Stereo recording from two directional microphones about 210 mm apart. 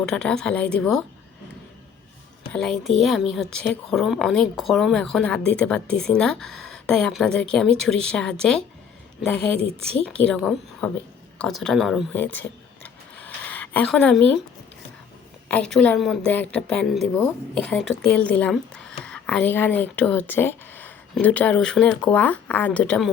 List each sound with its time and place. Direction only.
0.0 s a woman's voice: 5° left (ahead or behind)
2.5 s a woman's voice: 5° left (ahead or behind)
11.3 s a sound: 5° left (ahead or behind)
15.4 s a woman's voice: 5° left (ahead or behind)